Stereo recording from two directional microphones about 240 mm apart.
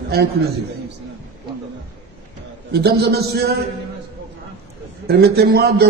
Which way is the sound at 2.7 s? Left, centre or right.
Right.